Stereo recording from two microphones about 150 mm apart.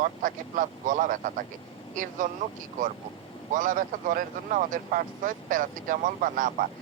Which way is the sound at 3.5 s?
60° right (ahead or behind).